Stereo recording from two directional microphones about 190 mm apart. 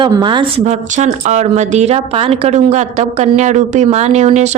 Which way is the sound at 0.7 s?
35° right (ahead or behind).